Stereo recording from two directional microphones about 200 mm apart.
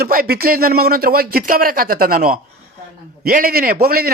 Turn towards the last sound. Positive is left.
turn(degrees=-50)  # may be behind; listen again after turning